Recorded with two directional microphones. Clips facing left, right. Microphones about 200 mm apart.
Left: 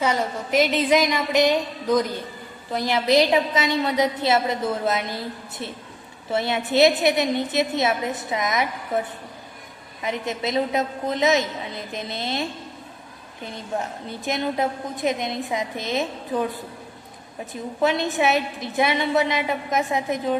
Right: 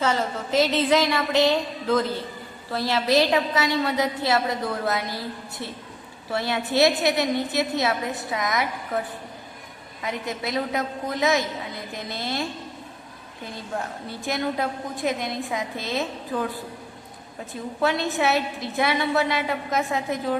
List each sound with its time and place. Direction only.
0.0 s a woman's voice: 15° left (ahead or behind)
10.0 s a woman's voice: 20° left (ahead or behind)
17.5 s a woman's voice: 20° left (ahead or behind)